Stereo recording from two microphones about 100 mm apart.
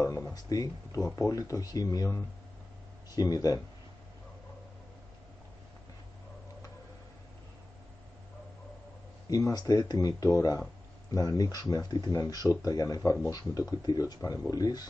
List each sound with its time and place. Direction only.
0.3 s speech: 40° left (ahead or behind)
9.3 s speech: 40° left (ahead or behind)